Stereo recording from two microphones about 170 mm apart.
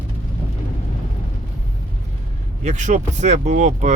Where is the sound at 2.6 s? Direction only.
45° right (ahead or behind).